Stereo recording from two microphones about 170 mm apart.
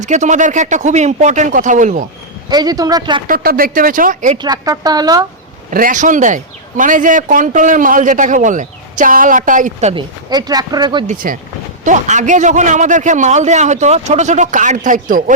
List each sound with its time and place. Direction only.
0.0 s speech: 45° right (ahead or behind)
2.5 s speech: 25° right (ahead or behind)
3.2 s speech: 60° right (ahead or behind)
4.4 s speech: 20° right (ahead or behind)
5.7 s speech: 50° right (ahead or behind)
9.9 s speech: 25° right (ahead or behind)
11.0 s speech: 50° right (ahead or behind)